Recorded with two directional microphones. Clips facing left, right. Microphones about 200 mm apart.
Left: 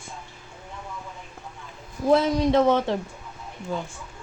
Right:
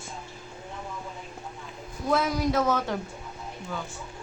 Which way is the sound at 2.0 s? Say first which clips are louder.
Left 6 dB; 30° left (ahead or behind).